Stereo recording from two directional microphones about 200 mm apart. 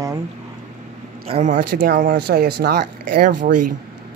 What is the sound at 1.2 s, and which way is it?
Speech, 35° right (ahead or behind).